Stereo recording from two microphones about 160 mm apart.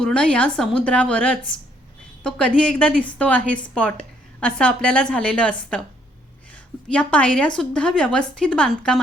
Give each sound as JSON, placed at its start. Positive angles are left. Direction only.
{"t": 0.0, "sound": "a woman's voice", "side_deg": 5}
{"t": 2.6, "sound": "a woman's voice", "side_deg": 5}
{"t": 6.8, "sound": "a woman's voice", "side_deg": 5}